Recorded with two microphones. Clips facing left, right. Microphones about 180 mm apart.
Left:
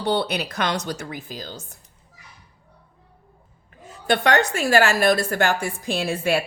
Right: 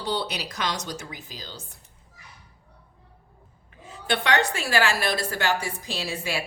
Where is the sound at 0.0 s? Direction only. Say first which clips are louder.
Left 6 dB; 60° left (ahead or behind).